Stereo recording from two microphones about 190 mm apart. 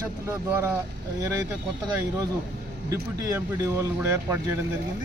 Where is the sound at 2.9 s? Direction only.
15° right (ahead or behind).